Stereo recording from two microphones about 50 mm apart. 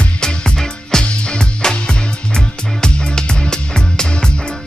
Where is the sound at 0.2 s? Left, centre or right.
Centre.